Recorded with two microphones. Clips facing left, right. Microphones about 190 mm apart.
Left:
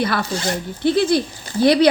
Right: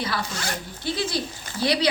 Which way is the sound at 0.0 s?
60° left (ahead or behind).